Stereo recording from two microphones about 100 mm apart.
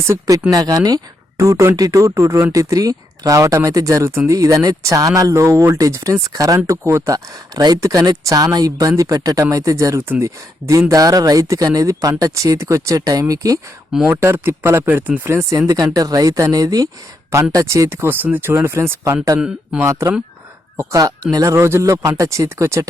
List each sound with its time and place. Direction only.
0.1 s speech: 35° right (ahead or behind)
14.1 s speech: 25° right (ahead or behind)
15.4 s speech: 35° right (ahead or behind)
19.4 s speech: 5° right (ahead or behind)
19.8 s speech: 30° right (ahead or behind)